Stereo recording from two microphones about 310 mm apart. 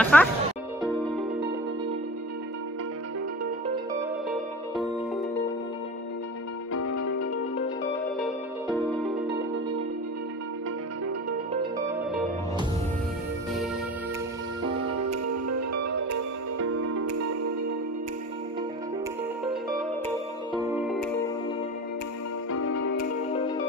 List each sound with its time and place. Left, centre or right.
0.0 s speech: centre
6.8 s music: left
14.6 s music: right
20.6 s music: centre
22.6 s music: left